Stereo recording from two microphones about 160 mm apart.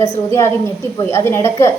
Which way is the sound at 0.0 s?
20° left (ahead or behind).